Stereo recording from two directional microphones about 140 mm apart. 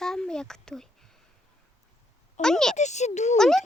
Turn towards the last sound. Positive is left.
turn(degrees=5)  # may be behind; listen again after turning